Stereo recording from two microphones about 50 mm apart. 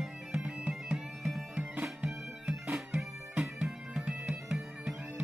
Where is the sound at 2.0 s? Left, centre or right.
Centre.